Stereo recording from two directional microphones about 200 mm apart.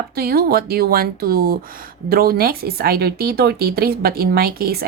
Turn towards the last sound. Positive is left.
turn(degrees=-50)  # may be behind; listen again after turning